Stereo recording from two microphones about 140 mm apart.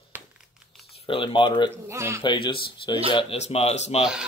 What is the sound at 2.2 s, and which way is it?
Speech, 35° left (ahead or behind).